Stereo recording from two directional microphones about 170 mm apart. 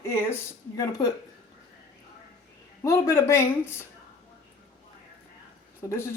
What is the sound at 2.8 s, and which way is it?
Speech, 20° left (ahead or behind).